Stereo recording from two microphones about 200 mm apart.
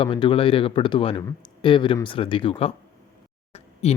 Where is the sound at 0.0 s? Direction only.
25° left (ahead or behind).